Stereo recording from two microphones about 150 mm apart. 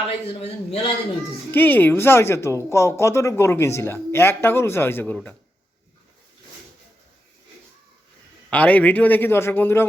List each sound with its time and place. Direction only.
0.3 s a man's voice: 40° left (ahead or behind)
1.5 s speech: 10° left (ahead or behind)
8.4 s speech: 10° left (ahead or behind)